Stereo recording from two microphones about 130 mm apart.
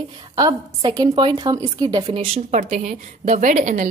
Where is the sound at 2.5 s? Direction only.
70° right (ahead or behind).